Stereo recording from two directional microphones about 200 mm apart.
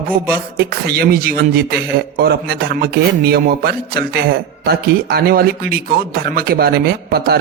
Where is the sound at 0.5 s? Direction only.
50° right (ahead or behind).